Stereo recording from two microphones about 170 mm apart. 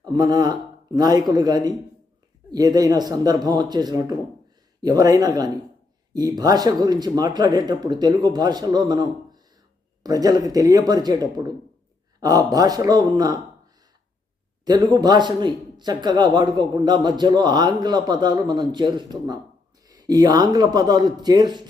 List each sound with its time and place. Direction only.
0.0 s a man's voice: 25° right (ahead or behind)
14.6 s a man's voice: 25° right (ahead or behind)